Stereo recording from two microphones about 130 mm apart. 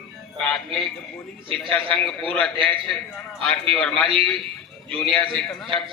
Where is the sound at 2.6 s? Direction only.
5° left (ahead or behind).